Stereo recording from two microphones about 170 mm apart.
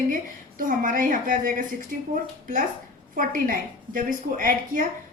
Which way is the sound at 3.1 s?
55° right (ahead or behind).